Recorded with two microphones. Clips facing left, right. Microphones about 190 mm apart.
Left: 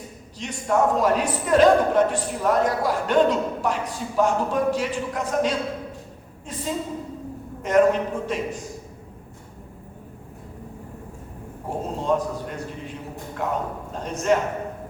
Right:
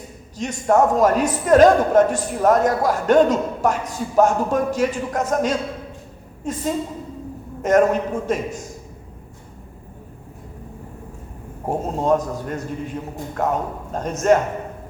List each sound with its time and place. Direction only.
0.3 s a man's voice: 45° right (ahead or behind)
11.8 s a man's voice: 45° right (ahead or behind)